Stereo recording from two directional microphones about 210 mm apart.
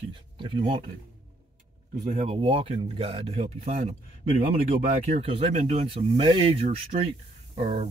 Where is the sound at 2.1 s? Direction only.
30° right (ahead or behind).